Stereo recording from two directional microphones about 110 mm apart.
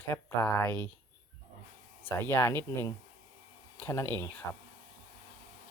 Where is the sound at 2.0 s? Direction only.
15° left (ahead or behind).